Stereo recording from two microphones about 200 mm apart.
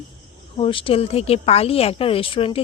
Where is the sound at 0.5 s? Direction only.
25° left (ahead or behind).